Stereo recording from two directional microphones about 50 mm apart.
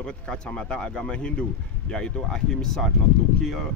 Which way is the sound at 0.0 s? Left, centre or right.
Centre.